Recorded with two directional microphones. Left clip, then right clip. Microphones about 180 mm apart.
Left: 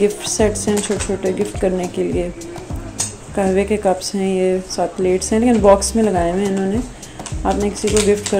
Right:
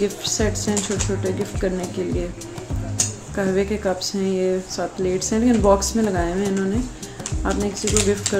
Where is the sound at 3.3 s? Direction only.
15° left (ahead or behind).